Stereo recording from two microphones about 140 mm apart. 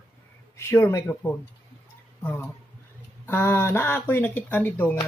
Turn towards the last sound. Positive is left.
turn(degrees=15)  # may be behind; listen again after turning